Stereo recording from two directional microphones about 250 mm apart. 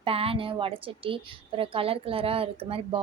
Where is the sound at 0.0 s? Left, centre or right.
Right.